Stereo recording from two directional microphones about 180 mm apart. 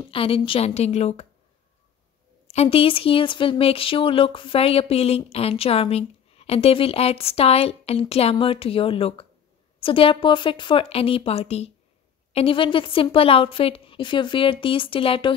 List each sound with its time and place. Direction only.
0.1 s speech: 30° left (ahead or behind)
2.4 s a woman's voice: 35° left (ahead or behind)